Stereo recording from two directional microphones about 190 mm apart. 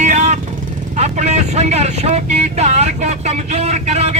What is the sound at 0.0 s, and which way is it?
Vehicle, 40° right (ahead or behind).